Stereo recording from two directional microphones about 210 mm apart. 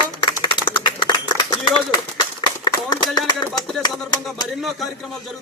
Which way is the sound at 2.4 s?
20° left (ahead or behind).